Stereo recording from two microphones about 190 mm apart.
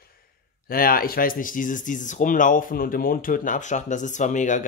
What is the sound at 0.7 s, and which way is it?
Speech, 50° left (ahead or behind).